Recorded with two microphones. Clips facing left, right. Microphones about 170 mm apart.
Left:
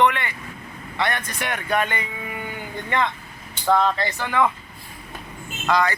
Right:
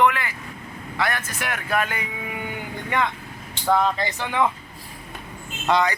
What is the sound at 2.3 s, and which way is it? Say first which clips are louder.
Livestock: right 1 dB; 15° right (ahead or behind).